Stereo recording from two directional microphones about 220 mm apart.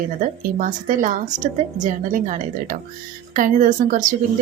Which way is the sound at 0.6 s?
35° right (ahead or behind).